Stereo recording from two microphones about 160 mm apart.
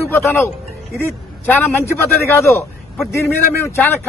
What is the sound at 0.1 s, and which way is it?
A man's voice, 15° left (ahead or behind).